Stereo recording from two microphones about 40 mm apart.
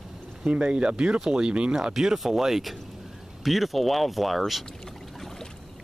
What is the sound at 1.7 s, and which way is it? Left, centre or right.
Speech, centre.